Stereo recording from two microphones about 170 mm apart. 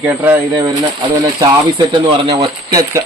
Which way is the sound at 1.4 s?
25° right (ahead or behind).